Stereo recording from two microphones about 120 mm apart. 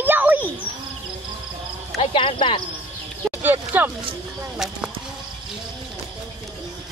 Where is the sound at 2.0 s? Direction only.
45° left (ahead or behind).